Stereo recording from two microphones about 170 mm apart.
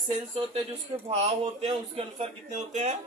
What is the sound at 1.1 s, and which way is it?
A man's voice, 40° right (ahead or behind).